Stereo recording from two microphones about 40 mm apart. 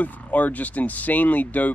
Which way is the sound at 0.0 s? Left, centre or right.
Left.